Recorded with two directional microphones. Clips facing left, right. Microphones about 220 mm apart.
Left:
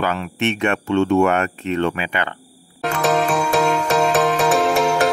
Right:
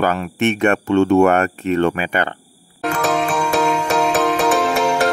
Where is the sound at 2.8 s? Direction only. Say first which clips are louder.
Even; centre (ahead or behind).